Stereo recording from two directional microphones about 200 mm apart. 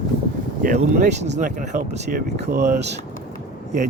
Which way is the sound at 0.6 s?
40° right (ahead or behind).